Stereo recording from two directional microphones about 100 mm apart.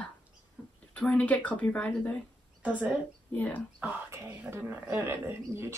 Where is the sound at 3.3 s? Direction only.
15° left (ahead or behind).